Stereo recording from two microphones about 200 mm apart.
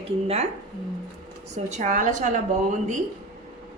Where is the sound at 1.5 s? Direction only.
35° right (ahead or behind).